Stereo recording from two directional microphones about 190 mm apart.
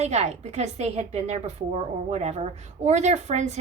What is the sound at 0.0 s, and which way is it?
A woman's voice, 35° right (ahead or behind).